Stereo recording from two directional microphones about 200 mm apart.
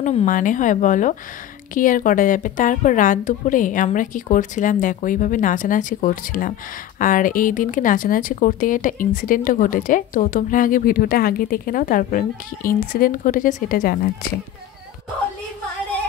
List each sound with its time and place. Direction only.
0.0 s a woman's voice: 35° left (ahead or behind)